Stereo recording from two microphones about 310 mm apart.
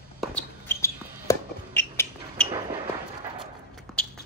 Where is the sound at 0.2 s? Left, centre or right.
Centre.